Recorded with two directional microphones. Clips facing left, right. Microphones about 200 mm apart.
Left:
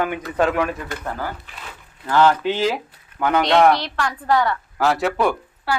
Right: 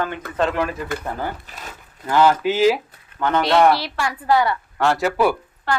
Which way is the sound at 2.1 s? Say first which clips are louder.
Even; 10° right (ahead or behind).